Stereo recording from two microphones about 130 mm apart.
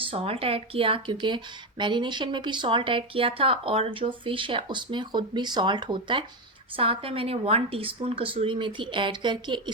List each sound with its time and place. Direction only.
0.1 s a woman's voice: 50° right (ahead or behind)